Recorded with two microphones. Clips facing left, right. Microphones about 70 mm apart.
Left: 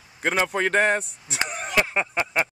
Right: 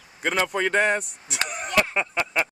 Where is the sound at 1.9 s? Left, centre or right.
Left.